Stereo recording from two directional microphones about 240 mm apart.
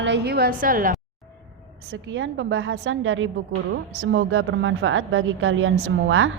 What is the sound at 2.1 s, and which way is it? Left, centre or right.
A woman's voice, right.